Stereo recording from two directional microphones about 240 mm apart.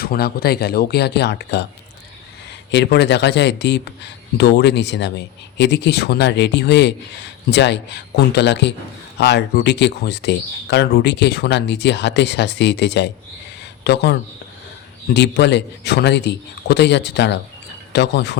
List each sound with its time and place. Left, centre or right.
0.0 s speech: left
2.7 s speech: left